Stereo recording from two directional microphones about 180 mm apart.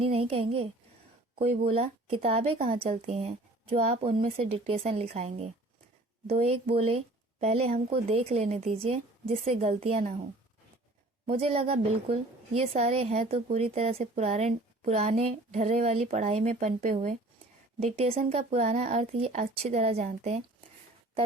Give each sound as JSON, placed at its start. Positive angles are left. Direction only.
{"t": 0.0, "sound": "a woman's voice", "side_deg": -35}
{"t": 11.3, "sound": "a woman's voice", "side_deg": -35}